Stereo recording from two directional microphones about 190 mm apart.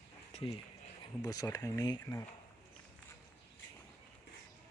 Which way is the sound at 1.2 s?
20° left (ahead or behind).